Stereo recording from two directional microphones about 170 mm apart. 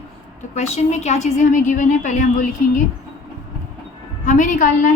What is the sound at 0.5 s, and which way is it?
A woman's voice, 40° left (ahead or behind).